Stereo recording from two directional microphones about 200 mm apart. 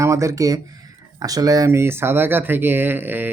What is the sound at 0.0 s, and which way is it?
Speech, 15° right (ahead or behind).